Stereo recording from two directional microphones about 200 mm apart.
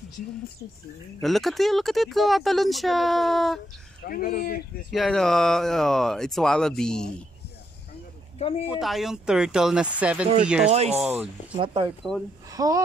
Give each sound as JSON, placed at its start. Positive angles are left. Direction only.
{"t": 1.2, "sound": "speech", "side_deg": 0}
{"t": 4.0, "sound": "speech", "side_deg": 45}
{"t": 4.9, "sound": "speech", "side_deg": 0}
{"t": 8.4, "sound": "speech", "side_deg": 30}
{"t": 8.7, "sound": "speech", "side_deg": 0}
{"t": 10.7, "sound": "speech", "side_deg": -30}
{"t": 11.0, "sound": "speech", "side_deg": -10}
{"t": 11.5, "sound": "speech", "side_deg": -25}